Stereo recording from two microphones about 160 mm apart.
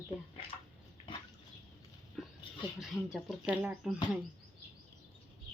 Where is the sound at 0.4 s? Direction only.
35° left (ahead or behind).